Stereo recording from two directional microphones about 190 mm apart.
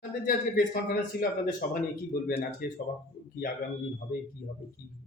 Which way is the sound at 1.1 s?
55° left (ahead or behind).